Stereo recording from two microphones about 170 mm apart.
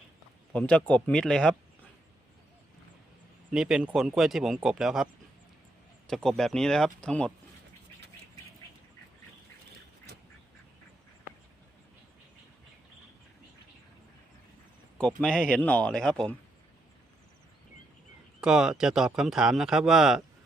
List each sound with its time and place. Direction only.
0.5 s speech: 5° left (ahead or behind)
3.5 s speech: 5° right (ahead or behind)
6.2 s speech: 5° left (ahead or behind)
14.9 s speech: 5° left (ahead or behind)
18.3 s speech: 5° right (ahead or behind)